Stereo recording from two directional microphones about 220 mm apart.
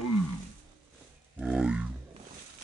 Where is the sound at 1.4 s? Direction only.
5° right (ahead or behind).